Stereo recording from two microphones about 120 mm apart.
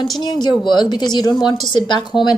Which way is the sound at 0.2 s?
40° left (ahead or behind).